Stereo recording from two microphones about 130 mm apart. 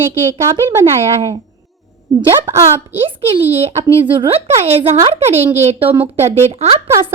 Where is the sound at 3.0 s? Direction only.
50° right (ahead or behind).